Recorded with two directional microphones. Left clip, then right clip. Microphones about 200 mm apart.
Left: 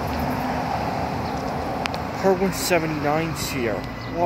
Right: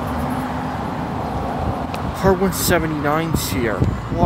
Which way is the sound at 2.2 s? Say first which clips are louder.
Right 3 dB; 15° right (ahead or behind).